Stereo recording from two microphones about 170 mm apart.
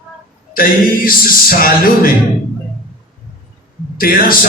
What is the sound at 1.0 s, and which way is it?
Music, 60° left (ahead or behind).